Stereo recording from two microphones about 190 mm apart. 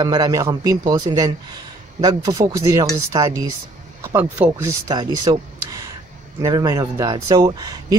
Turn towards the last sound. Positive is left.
turn(degrees=-20)  # may be behind; listen again after turning